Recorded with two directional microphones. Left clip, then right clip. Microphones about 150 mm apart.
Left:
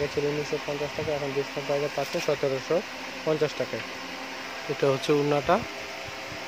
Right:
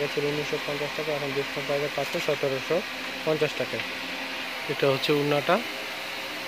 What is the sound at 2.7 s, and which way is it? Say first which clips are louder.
Speech: left 1 dB; 15° left (ahead or behind).